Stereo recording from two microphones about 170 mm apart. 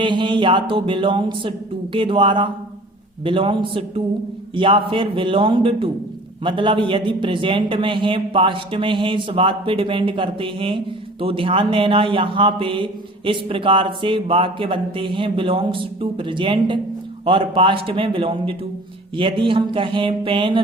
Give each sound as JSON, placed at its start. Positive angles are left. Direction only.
{"t": 0.0, "sound": "a man's voice", "side_deg": -30}